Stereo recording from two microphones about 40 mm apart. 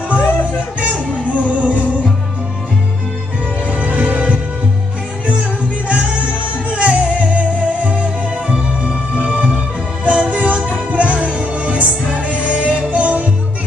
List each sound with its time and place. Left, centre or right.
0.2 s music: left
1.3 s music: right
3.8 s music: right
6.7 s music: right